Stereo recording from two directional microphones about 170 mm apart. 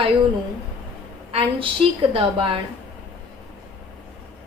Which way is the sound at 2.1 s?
30° right (ahead or behind).